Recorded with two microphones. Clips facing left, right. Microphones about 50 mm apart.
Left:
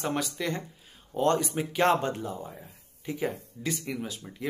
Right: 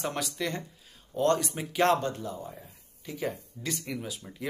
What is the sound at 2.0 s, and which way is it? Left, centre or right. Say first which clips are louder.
Speech: left 2 dB; left.